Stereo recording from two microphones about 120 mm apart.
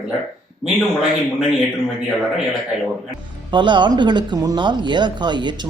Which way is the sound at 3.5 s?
40° right (ahead or behind).